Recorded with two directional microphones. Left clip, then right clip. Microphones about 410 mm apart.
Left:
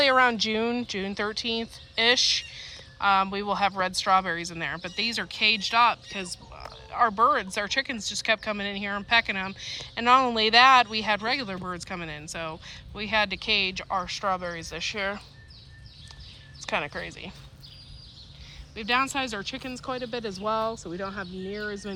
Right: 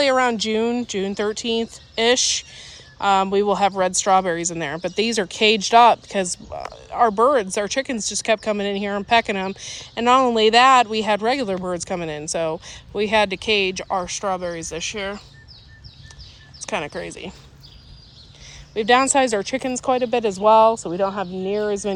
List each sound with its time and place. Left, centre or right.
0.0 s speech: centre
16.6 s speech: centre
18.7 s speech: centre